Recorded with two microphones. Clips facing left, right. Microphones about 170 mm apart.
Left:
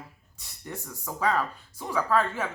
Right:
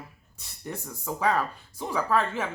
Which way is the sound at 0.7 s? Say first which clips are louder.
Right 3 dB; 10° right (ahead or behind).